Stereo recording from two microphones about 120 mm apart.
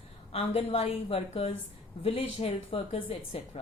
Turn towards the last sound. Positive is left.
turn(degrees=55)  # may be behind; listen again after turning